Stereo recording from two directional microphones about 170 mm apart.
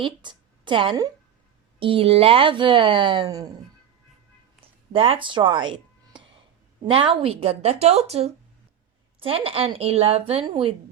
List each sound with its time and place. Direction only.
0.0 s a woman's voice: 25° right (ahead or behind)
4.9 s a woman's voice: 35° right (ahead or behind)